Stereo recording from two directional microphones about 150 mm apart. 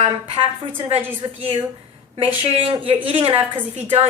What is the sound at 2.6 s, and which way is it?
Speech, 40° right (ahead or behind).